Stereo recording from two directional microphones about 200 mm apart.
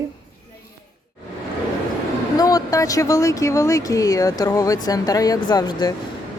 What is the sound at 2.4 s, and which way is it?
Speech, 15° left (ahead or behind).